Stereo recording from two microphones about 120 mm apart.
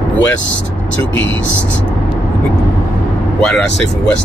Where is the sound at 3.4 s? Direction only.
5° left (ahead or behind).